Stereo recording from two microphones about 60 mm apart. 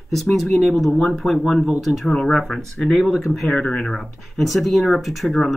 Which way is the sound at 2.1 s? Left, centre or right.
Centre.